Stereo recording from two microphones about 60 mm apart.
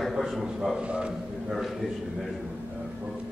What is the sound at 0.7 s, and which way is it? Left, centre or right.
Speech, centre.